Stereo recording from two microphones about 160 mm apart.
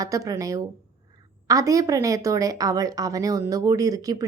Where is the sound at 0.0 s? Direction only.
20° right (ahead or behind).